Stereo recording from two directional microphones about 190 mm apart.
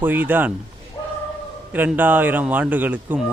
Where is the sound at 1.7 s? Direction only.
10° right (ahead or behind).